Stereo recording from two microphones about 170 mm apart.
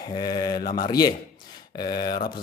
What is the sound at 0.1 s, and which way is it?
Speech, 25° left (ahead or behind).